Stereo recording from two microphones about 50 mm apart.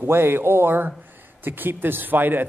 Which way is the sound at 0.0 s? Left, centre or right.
Right.